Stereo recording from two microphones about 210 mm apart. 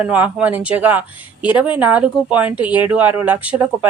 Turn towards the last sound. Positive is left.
turn(degrees=-10)  # may be behind; listen again after turning